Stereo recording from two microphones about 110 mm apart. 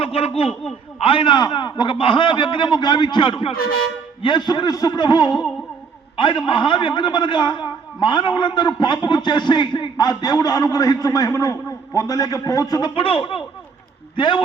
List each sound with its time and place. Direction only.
0.0 s a man's voice: 60° left (ahead or behind); by 12.9 s 35° left (ahead or behind)
12.9 s a man's voice: 55° left (ahead or behind)